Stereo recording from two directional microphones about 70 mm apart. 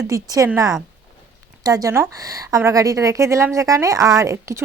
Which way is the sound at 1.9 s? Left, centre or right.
Right.